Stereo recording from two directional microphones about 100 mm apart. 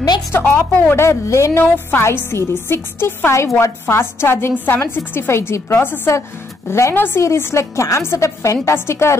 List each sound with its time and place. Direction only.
0.3 s a woman's voice: 15° left (ahead or behind)